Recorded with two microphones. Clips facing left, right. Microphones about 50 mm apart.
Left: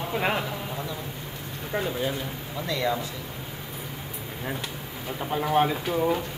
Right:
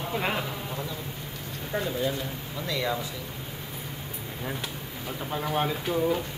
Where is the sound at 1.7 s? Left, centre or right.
Centre.